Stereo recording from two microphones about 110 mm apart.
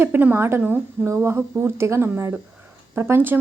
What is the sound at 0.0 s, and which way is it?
A woman's voice, 20° right (ahead or behind).